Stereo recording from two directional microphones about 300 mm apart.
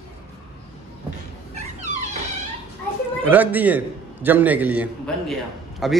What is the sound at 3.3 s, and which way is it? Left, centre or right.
A man's voice, centre.